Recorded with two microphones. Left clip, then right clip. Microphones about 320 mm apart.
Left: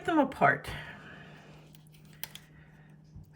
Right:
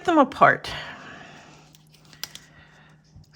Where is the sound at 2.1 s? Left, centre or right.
Centre.